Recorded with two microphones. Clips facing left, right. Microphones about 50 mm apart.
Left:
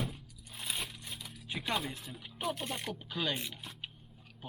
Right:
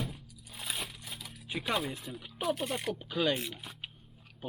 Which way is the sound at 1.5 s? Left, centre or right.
Centre.